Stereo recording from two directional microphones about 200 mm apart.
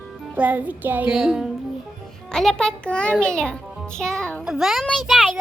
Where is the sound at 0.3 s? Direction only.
10° right (ahead or behind).